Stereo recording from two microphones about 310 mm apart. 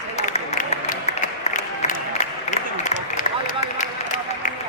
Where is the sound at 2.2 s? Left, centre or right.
Left.